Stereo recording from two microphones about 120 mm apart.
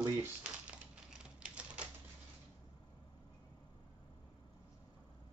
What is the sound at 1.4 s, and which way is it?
Typewriter, 10° right (ahead or behind).